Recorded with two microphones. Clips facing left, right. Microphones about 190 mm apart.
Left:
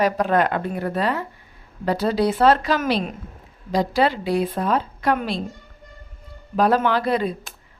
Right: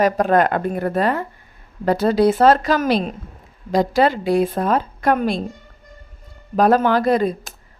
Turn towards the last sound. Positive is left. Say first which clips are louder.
# right 5 dB
turn(degrees=-45)  # may be behind; listen again after turning